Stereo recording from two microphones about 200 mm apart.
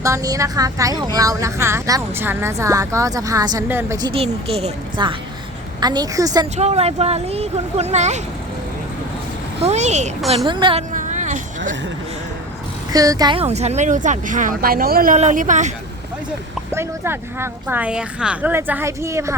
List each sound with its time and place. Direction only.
0.0 s a woman's voice: 15° right (ahead or behind)
6.6 s speech: 35° right (ahead or behind)
9.6 s speech: 35° right (ahead or behind)
10.4 s a woman's voice: 25° right (ahead or behind)
10.9 s a sound: 40° right (ahead or behind)
12.9 s speech: 20° right (ahead or behind); by 15.7 s 40° right (ahead or behind)
16.7 s speech: 10° right (ahead or behind)